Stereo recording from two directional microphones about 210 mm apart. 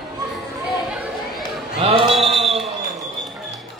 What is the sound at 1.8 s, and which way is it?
Music, 25° right (ahead or behind).